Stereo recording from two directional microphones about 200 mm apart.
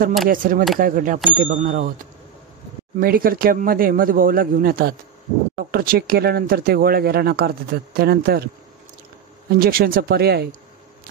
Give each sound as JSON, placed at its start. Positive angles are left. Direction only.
{"t": 0.3, "sound": "speech", "side_deg": -45}
{"t": 3.0, "sound": "speech", "side_deg": -45}
{"t": 9.5, "sound": "speech", "side_deg": -50}